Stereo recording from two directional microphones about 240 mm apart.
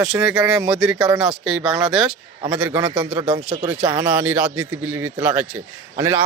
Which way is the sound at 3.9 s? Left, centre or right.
Centre.